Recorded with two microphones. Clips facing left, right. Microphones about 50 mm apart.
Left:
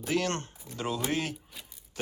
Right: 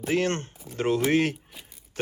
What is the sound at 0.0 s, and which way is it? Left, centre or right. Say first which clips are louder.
Speech: right 4 dB; right.